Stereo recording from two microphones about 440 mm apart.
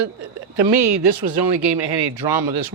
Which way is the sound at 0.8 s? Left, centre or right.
Right.